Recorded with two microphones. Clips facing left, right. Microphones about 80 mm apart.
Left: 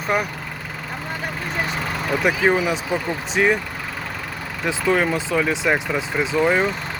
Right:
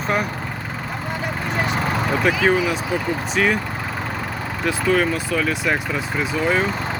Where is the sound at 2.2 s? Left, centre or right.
Centre.